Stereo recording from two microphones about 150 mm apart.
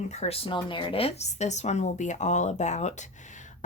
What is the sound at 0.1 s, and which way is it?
A woman's voice, 45° left (ahead or behind).